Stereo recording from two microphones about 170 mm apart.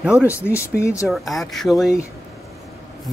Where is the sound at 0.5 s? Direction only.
15° left (ahead or behind).